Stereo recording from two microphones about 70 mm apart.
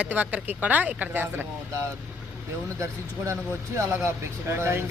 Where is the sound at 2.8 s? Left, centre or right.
Right.